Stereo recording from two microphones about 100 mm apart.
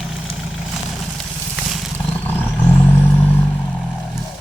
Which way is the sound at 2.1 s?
15° left (ahead or behind).